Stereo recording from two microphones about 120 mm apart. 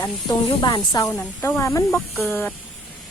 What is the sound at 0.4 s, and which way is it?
Speech, 35° left (ahead or behind).